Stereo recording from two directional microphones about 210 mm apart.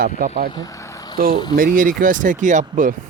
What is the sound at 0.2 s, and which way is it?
Speech, 40° right (ahead or behind).